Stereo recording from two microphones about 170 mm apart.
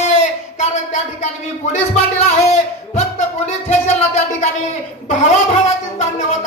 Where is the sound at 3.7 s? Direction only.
45° left (ahead or behind).